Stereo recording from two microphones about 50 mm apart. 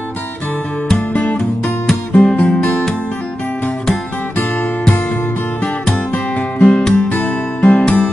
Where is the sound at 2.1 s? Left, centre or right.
Left.